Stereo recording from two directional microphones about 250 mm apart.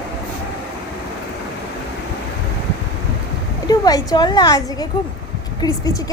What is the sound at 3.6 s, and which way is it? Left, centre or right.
A woman's voice, centre.